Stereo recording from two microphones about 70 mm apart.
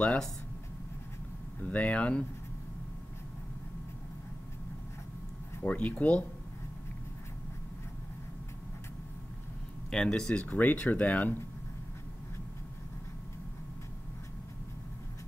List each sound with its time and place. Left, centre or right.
1.6 s speech: centre
5.6 s speech: centre
9.8 s speech: centre